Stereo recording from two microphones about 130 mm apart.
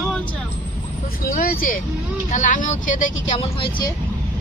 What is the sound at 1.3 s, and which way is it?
Speech, 90° left.